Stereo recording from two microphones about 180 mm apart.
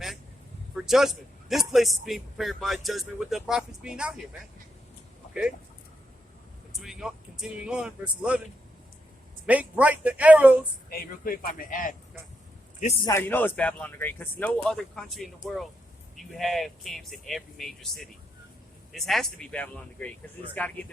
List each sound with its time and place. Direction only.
0.8 s a man's voice: centre (ahead or behind)
5.3 s speech: 5° right (ahead or behind)
6.7 s a man's voice: centre (ahead or behind)
9.5 s speech: 10° right (ahead or behind)
10.8 s speech: 55° left (ahead or behind)
13.1 s a man's voice: 10° left (ahead or behind)